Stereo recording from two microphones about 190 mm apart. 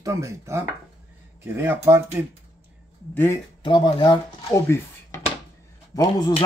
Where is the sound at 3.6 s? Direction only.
25° left (ahead or behind).